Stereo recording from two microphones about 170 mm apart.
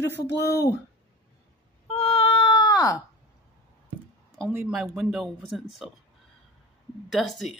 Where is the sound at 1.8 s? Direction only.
35° left (ahead or behind).